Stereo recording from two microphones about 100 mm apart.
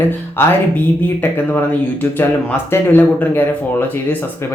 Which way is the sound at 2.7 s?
20° left (ahead or behind).